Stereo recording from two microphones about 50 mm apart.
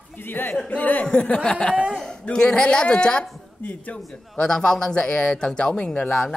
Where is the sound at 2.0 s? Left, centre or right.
Centre.